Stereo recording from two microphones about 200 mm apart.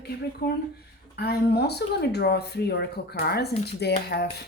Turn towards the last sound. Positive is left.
turn(degrees=55)  # may be behind; listen again after turning